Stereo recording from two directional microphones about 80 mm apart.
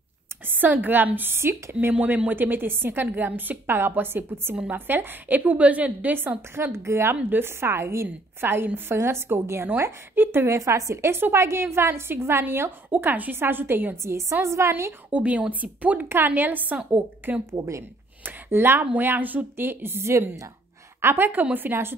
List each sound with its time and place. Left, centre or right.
0.5 s a woman's voice: right
15.0 s a woman's voice: centre
17.6 s a woman's voice: right